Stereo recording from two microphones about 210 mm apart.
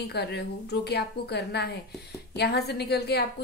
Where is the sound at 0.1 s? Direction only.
50° left (ahead or behind).